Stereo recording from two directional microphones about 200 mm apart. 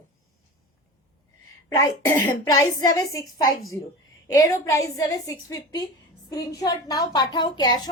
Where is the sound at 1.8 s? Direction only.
10° left (ahead or behind).